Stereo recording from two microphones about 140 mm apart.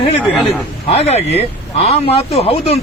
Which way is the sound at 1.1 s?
50° left (ahead or behind).